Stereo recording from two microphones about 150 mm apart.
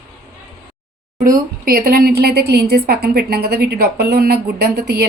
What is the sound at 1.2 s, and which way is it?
A woman's voice, 70° right (ahead or behind).